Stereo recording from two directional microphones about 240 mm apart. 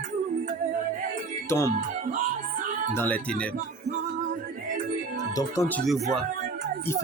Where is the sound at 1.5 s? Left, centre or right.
Centre.